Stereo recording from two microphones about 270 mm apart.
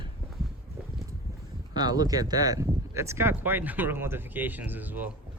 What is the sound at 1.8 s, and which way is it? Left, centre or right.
Speech, centre.